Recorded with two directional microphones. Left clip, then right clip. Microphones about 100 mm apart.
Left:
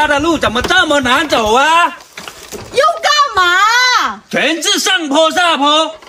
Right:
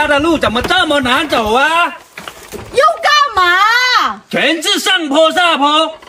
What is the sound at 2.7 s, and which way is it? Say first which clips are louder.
A woman's voice: right 1 dB; centre (ahead or behind).